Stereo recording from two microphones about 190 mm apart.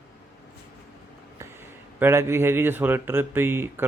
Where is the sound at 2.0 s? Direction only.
10° right (ahead or behind).